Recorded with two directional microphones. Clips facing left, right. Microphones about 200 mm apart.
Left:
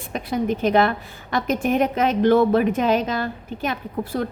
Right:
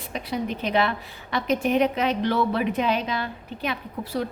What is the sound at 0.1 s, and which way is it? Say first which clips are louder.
A woman's voice: left 5 dB; 50° left (ahead or behind).